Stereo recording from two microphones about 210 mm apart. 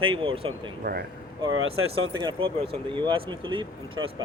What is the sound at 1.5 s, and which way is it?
Speech, 75° right (ahead or behind).